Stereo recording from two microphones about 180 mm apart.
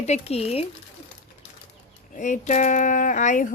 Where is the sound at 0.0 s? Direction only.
35° left (ahead or behind).